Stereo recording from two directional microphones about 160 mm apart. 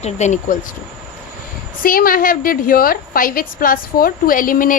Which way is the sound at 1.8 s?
60° left (ahead or behind).